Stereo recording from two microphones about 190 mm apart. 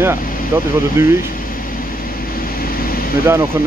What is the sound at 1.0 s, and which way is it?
Speech, 15° right (ahead or behind).